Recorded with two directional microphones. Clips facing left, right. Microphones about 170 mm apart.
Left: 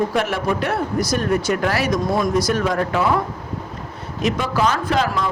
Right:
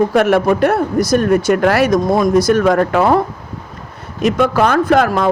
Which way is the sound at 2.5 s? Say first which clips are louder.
Right 8 dB; 55° right (ahead or behind).